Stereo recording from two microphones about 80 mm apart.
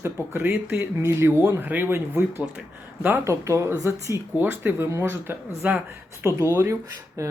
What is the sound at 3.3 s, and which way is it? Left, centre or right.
Speech, right.